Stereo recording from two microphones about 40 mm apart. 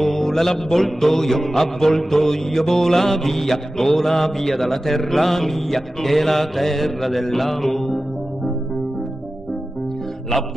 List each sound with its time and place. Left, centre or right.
0.0 s mantra: centre